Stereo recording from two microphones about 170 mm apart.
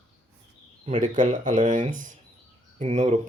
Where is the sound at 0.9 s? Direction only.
50° right (ahead or behind).